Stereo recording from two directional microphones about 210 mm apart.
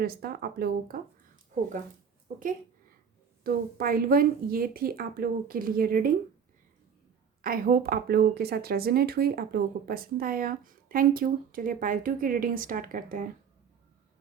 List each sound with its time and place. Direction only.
0.0 s speech: 45° right (ahead or behind)
3.4 s speech: 45° right (ahead or behind)
7.4 s speech: 45° right (ahead or behind)